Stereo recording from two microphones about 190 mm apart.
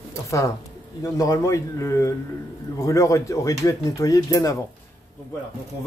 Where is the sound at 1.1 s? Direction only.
20° left (ahead or behind).